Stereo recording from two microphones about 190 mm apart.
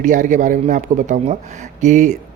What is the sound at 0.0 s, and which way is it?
Speech, 40° right (ahead or behind).